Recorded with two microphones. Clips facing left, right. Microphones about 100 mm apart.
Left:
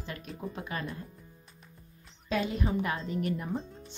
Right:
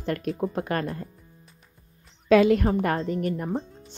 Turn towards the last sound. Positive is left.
turn(degrees=-35)  # may be behind; listen again after turning